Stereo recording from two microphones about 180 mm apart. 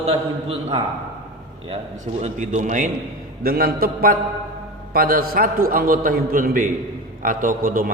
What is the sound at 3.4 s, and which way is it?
A man's voice, 55° right (ahead or behind).